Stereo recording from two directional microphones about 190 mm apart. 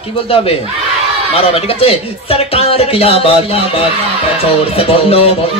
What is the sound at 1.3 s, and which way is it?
Speech, 30° left (ahead or behind).